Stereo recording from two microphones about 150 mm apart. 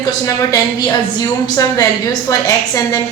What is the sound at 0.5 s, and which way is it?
A woman's voice, 25° left (ahead or behind).